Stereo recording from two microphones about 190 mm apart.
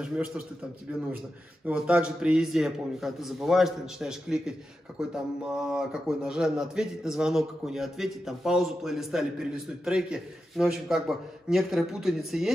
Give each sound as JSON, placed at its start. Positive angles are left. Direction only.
{"t": 0.0, "sound": "a man's voice", "side_deg": -5}
{"t": 1.7, "sound": "a man's voice", "side_deg": -5}